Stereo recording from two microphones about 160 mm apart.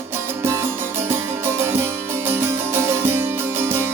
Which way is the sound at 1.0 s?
15° right (ahead or behind).